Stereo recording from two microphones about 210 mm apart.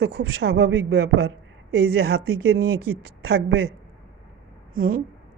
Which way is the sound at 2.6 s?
90° right.